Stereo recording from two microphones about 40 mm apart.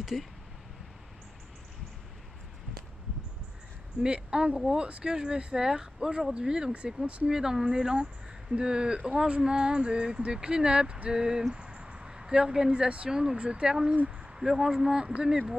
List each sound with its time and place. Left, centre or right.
0.0 s speech: centre
4.0 s female singing: right
7.2 s speech: centre
7.6 s female singing: centre
13.1 s speech: centre
13.4 s female singing: right
14.4 s speech: centre